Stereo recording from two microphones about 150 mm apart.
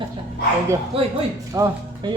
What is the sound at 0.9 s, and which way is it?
Speech, 40° right (ahead or behind).